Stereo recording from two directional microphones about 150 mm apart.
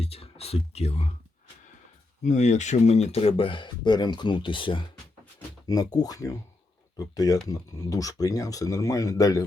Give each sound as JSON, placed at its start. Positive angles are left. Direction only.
{"t": 0.0, "sound": "speech", "side_deg": 40}
{"t": 2.2, "sound": "speech", "side_deg": 50}